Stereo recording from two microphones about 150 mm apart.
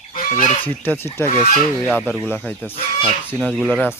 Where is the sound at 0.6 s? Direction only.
10° left (ahead or behind).